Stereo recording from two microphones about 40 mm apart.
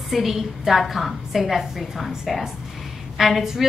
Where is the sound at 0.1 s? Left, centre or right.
Centre.